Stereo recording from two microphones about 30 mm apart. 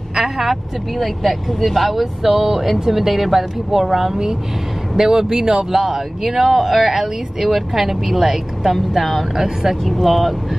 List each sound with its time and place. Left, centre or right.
0.1 s speech: centre
4.9 s speech: centre
8.9 s speech: centre
9.3 s speech: centre
9.8 s speech: centre